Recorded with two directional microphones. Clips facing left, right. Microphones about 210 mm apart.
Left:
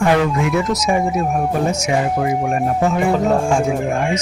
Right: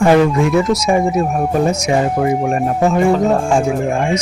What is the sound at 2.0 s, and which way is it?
Speech, 30° right (ahead or behind).